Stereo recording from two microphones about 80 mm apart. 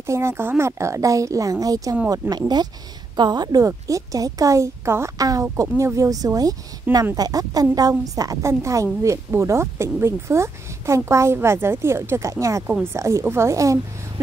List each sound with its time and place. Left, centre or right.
0.0 s a woman's voice: right